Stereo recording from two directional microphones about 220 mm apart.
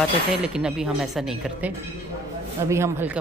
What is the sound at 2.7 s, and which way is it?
Speech, 10° right (ahead or behind).